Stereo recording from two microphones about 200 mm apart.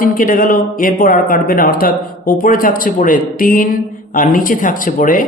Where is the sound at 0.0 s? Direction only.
45° left (ahead or behind).